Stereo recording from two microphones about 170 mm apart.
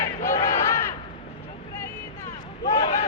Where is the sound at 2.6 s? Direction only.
35° left (ahead or behind).